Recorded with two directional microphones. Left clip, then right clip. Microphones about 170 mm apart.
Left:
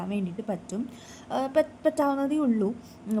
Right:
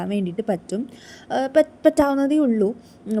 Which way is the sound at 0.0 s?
35° right (ahead or behind).